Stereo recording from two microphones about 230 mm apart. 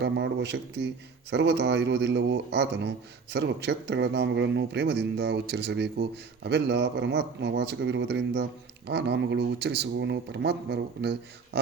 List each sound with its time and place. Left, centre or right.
0.0 s a man's voice: right